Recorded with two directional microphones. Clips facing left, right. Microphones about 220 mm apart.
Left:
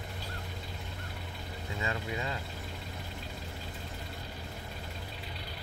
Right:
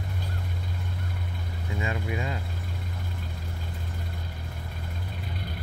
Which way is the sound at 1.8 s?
15° right (ahead or behind).